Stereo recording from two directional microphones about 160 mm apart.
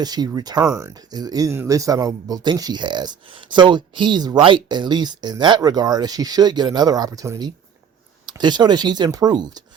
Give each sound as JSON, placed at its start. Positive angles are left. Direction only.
{"t": 0.0, "sound": "speech", "side_deg": -25}